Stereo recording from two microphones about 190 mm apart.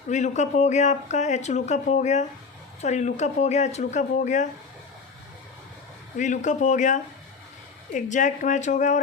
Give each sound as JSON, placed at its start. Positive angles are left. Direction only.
{"t": 0.1, "sound": "speech", "side_deg": 40}
{"t": 6.1, "sound": "speech", "side_deg": 40}